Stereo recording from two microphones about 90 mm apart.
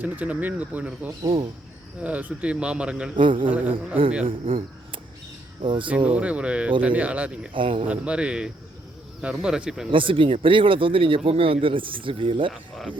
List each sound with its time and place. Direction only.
0.0 s a man's voice: 20° right (ahead or behind)
3.2 s speech: 70° right (ahead or behind)
4.3 s speech: 90° right
5.6 s speech: 70° right (ahead or behind)
6.1 s a man's voice: 15° right (ahead or behind)
7.5 s speech: 75° right (ahead or behind)
7.9 s a man's voice: 15° right (ahead or behind)
9.9 s speech: 70° right (ahead or behind)